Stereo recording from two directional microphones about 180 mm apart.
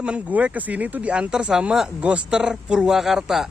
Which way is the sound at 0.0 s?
5° right (ahead or behind).